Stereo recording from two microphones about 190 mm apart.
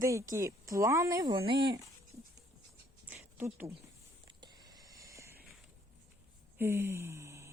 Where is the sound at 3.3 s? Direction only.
10° right (ahead or behind).